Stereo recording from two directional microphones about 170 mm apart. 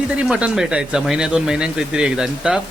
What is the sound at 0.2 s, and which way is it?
Speech, 5° right (ahead or behind).